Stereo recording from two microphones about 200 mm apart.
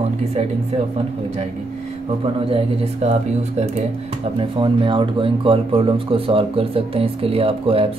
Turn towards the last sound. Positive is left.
turn(degrees=-30)  # may be behind; listen again after turning